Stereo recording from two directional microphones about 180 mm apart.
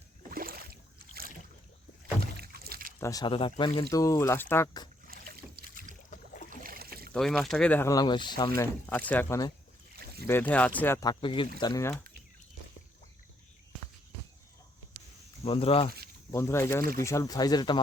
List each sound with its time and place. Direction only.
0.3 s boat: 55° right (ahead or behind)
2.2 s rowboat: 60° right (ahead or behind)
3.0 s speech: 20° left (ahead or behind)
5.0 s boat: 55° right (ahead or behind)
6.1 s boat: 50° left (ahead or behind)
6.6 s boat: 55° right (ahead or behind)
7.1 s speech: centre (ahead or behind); by 11.9 s 20° left (ahead or behind)
15.4 s speech: 30° left (ahead or behind)
16.3 s speech: 15° left (ahead or behind)